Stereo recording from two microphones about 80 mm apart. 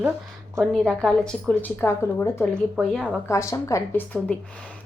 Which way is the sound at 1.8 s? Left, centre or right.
Left.